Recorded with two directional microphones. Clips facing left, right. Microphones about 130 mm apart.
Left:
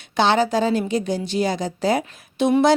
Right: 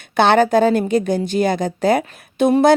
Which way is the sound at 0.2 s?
55° right (ahead or behind).